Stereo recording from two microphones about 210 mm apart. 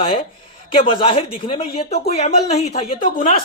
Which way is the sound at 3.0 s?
40° left (ahead or behind).